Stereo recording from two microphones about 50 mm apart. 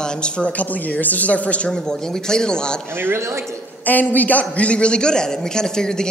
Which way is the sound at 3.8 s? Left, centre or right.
Left.